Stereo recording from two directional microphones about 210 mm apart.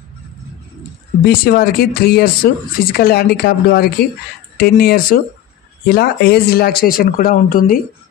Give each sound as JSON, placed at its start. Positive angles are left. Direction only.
{"t": 1.2, "sound": "speech", "side_deg": 45}